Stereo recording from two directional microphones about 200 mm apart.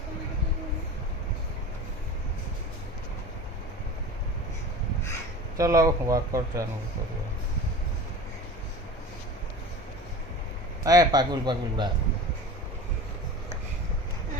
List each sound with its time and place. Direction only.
5.5 s speech: 15° right (ahead or behind)
10.8 s a man's voice: 20° right (ahead or behind)